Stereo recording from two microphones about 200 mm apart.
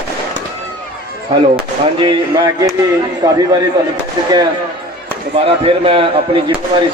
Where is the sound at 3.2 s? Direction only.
20° right (ahead or behind).